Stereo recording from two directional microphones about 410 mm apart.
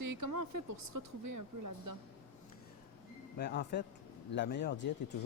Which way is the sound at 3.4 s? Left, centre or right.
Left.